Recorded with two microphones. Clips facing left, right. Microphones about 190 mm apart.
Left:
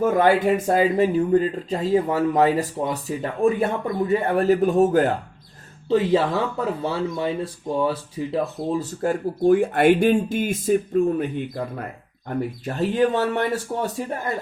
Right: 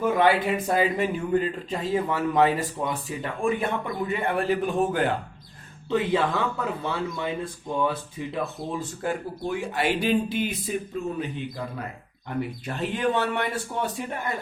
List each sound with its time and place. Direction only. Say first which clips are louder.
0.0 s speech: left 4 dB; 45° left (ahead or behind)
12.3 s speech: left 4 dB; 40° left (ahead or behind)